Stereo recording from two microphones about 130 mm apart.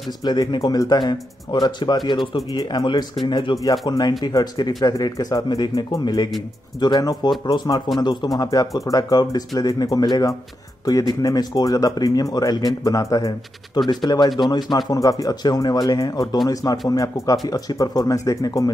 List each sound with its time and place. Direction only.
0.2 s speech: 35° left (ahead or behind)